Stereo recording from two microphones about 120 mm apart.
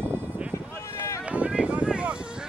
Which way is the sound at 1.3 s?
10° right (ahead or behind).